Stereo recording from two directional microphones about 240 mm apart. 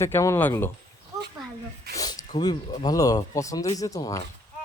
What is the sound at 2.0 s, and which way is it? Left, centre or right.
Speech, centre.